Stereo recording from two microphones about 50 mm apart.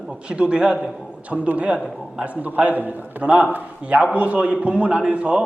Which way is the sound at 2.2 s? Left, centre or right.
Right.